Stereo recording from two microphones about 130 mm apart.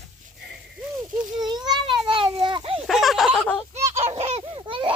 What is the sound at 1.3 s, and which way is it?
Children playing, 30° right (ahead or behind).